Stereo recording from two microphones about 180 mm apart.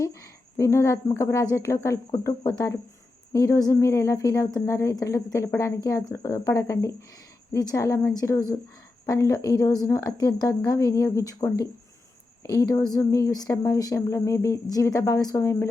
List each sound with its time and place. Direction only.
0.0 s speech: 15° left (ahead or behind)